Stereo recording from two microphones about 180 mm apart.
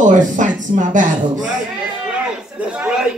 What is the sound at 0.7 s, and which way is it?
Speech, 35° right (ahead or behind).